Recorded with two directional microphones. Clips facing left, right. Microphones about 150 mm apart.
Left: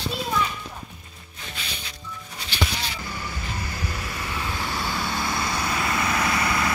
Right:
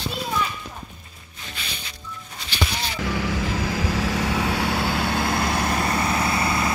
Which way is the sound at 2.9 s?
90° right.